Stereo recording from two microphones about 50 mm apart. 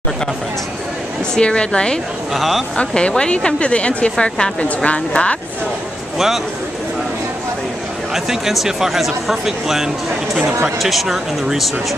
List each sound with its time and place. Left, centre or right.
1.3 s a woman's voice: centre
2.3 s speech: centre
2.7 s a woman's voice: centre
6.1 s speech: centre
8.1 s speech: centre